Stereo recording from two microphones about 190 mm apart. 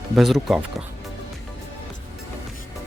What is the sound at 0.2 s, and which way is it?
Speech, centre (ahead or behind).